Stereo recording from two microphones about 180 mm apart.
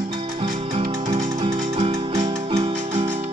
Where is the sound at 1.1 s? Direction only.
30° right (ahead or behind).